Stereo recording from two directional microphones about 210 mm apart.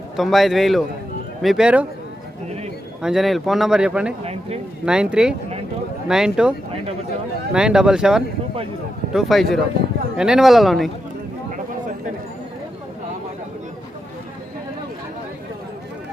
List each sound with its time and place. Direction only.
0.2 s speech: centre (ahead or behind)
3.0 s speech: centre (ahead or behind)
4.2 s a sound: 30° right (ahead or behind)
4.9 s speech: 5° right (ahead or behind)
7.5 s speech: 5° right (ahead or behind)